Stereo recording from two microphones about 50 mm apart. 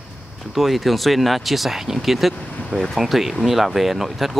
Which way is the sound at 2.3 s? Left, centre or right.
Left.